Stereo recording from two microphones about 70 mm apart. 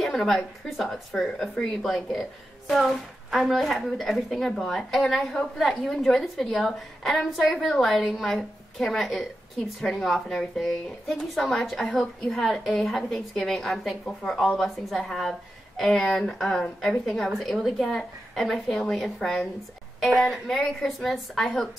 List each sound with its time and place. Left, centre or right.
0.0 s a woman's voice: centre